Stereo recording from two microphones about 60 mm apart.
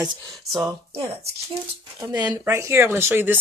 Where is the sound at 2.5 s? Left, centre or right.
Right.